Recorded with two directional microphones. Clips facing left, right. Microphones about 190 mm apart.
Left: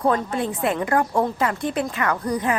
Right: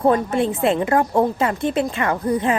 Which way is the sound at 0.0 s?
25° right (ahead or behind).